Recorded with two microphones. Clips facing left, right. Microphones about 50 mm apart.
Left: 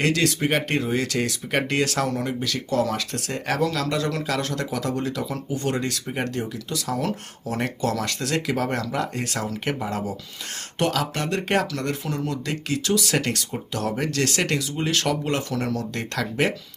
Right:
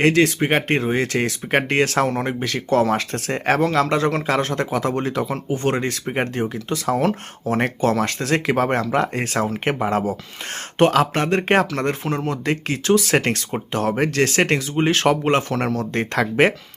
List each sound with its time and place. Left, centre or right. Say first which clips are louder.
0.0 s speech: right 5 dB; right